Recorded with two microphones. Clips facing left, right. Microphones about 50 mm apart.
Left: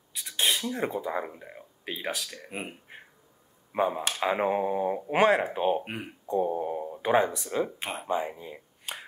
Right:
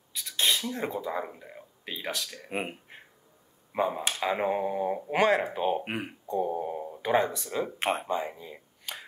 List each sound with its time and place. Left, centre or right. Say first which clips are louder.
0.1 s a sound: even; centre
0.7 s speech: left 2 dB; centre
3.7 s speech: left 1 dB; centre
5.9 s speech: right 3 dB; right
6.4 s a sound: left 2 dB; centre
7.0 s speech: left 2 dB; centre